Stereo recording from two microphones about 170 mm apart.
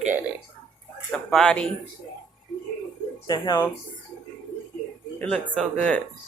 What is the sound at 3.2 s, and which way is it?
Speech, 25° left (ahead or behind).